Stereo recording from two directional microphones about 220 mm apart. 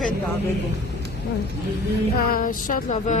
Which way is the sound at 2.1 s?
40° left (ahead or behind).